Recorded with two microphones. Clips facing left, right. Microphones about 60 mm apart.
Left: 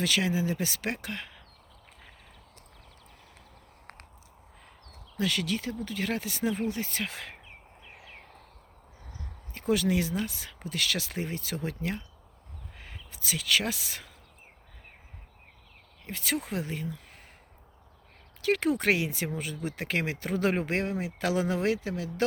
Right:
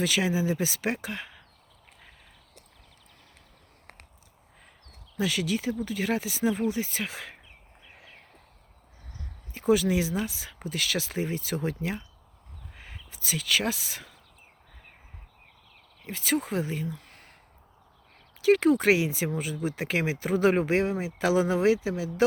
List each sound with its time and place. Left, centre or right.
0.0 s speech: centre
5.1 s speech: centre
9.6 s speech: centre
16.0 s speech: centre
18.4 s speech: centre